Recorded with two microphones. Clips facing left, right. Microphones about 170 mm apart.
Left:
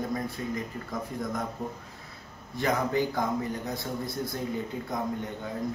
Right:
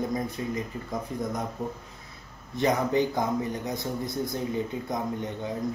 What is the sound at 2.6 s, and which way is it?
Speech, 20° right (ahead or behind).